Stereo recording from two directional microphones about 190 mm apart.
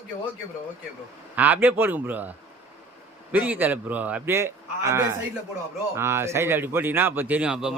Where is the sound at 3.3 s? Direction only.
10° right (ahead or behind).